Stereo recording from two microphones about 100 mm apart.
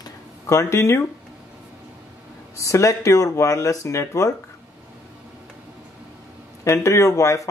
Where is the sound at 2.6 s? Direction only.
30° left (ahead or behind).